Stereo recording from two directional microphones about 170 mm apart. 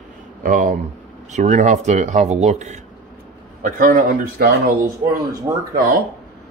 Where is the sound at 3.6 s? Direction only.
55° right (ahead or behind).